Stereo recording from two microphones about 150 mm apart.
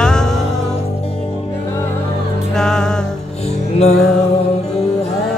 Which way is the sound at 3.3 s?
45° left (ahead or behind).